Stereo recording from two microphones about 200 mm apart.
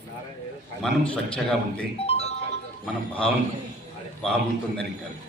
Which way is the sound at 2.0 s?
30° left (ahead or behind).